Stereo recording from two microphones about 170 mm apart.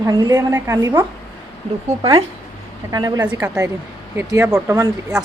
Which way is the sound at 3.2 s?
15° right (ahead or behind).